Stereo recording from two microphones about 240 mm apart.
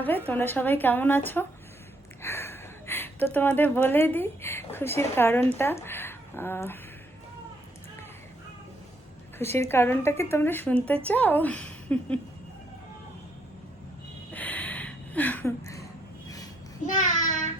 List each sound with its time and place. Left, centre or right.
0.3 s a woman's voice: centre
9.4 s a woman's voice: centre
14.3 s a sound: centre
16.8 s a child's voice: left